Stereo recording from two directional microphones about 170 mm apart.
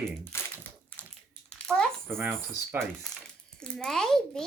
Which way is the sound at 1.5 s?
5° left (ahead or behind).